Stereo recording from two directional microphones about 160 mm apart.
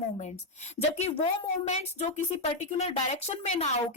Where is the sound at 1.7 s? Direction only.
45° left (ahead or behind).